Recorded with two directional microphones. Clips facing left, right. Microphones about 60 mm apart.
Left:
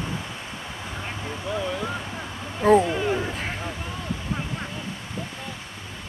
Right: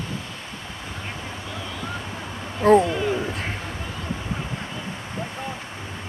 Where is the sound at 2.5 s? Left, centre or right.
Centre.